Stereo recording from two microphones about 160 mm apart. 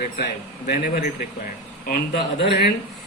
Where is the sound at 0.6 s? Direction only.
75° left (ahead or behind).